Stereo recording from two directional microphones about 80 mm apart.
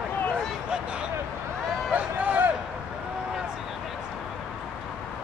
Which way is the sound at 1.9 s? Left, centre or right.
Centre.